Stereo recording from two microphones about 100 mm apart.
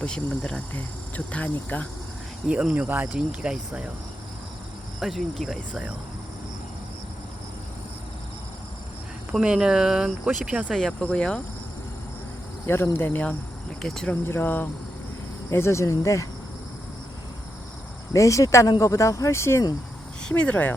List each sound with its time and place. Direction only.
0.0 s speech: 10° left (ahead or behind)
2.5 s speech: 10° right (ahead or behind)
4.9 s speech: centre (ahead or behind)
9.3 s speech: 10° right (ahead or behind)
10.8 s speech: 10° left (ahead or behind)
12.6 s speech: 25° left (ahead or behind)
13.8 s speech: 5° left (ahead or behind)
14.1 s speech: 20° left (ahead or behind)
18.1 s speech: 30° left (ahead or behind)
20.2 s speech: 10° left (ahead or behind)